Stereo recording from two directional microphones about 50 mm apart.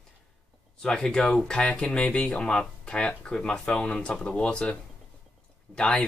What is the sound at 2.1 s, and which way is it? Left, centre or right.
Speech, left.